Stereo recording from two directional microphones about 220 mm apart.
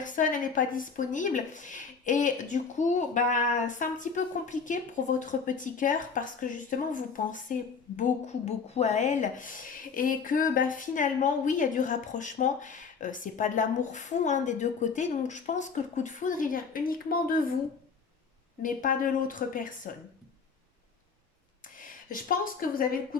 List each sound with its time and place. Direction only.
0.0 s a woman's voice: 35° left (ahead or behind)
18.6 s a woman's voice: 35° left (ahead or behind)
21.8 s speech: 40° left (ahead or behind)